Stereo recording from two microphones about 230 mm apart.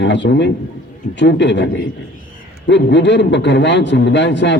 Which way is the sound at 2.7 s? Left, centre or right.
Left.